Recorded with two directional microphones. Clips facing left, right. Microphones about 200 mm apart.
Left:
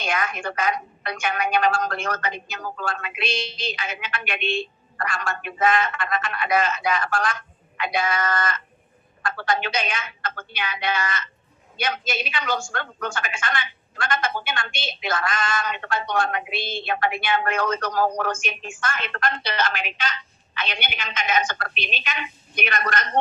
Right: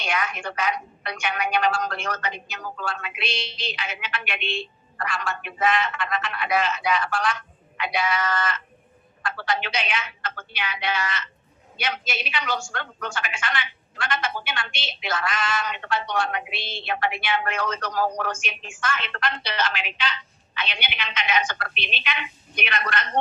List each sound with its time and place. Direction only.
0.0 s a woman's voice: 45° left (ahead or behind)